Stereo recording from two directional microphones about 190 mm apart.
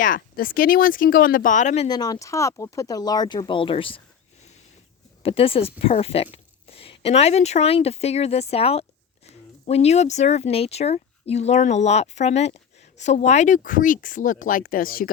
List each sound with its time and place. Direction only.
0.0 s speech: 45° left (ahead or behind)
1.9 s speech: 20° left (ahead or behind)
5.2 s speech: 30° left (ahead or behind); by 15.1 s 50° left (ahead or behind)